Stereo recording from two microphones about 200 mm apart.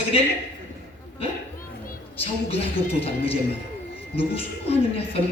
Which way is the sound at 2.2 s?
30° left (ahead or behind).